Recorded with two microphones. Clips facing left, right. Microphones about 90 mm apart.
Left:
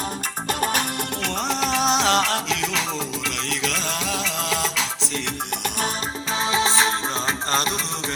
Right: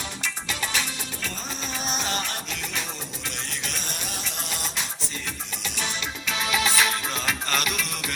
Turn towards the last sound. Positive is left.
turn(degrees=30)  # may be behind; listen again after turning